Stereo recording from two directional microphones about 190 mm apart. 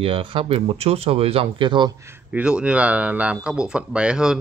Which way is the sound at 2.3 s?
5° right (ahead or behind).